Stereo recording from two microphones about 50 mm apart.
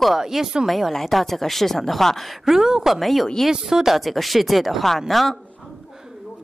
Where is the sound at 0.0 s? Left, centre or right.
Centre.